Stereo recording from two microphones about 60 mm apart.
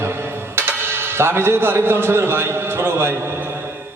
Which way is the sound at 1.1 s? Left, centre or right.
Right.